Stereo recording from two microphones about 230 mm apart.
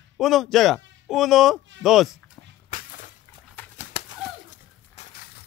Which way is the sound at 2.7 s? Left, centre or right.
Left.